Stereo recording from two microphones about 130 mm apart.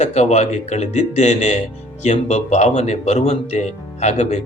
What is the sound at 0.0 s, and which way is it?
Speech, 60° left (ahead or behind).